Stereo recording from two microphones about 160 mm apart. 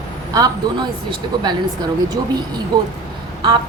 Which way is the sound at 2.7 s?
25° right (ahead or behind).